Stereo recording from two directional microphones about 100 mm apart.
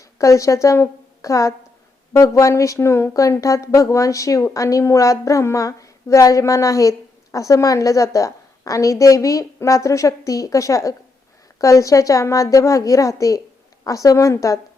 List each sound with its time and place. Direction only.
0.2 s a woman's voice: 30° left (ahead or behind)